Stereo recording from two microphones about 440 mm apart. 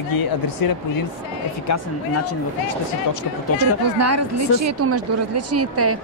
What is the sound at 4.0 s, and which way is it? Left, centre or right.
A woman's voice, right.